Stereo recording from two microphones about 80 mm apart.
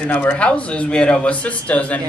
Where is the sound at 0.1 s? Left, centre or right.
Centre.